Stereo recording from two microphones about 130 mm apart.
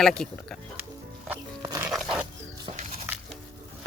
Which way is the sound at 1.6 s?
30° right (ahead or behind).